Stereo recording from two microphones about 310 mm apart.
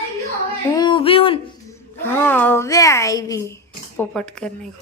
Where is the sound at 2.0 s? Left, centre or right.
Centre.